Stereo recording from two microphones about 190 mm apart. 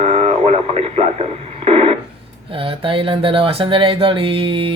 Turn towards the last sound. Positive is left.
turn(degrees=-30)  # may be behind; listen again after turning